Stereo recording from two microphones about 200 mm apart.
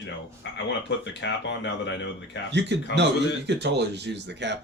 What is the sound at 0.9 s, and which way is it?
Speech, 60° left (ahead or behind).